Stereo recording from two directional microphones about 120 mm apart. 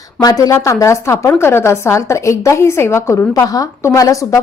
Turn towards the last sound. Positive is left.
turn(degrees=30)  # may be behind; listen again after turning